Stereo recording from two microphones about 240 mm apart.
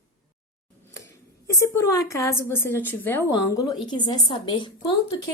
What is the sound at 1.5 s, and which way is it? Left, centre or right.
A woman's voice, centre.